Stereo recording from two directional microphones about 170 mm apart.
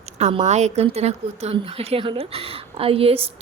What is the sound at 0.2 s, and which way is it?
A woman's voice, 40° right (ahead or behind).